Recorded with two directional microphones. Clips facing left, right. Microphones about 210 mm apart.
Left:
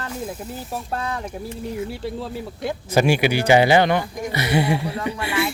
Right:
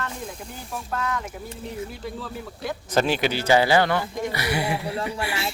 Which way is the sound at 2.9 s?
10° left (ahead or behind).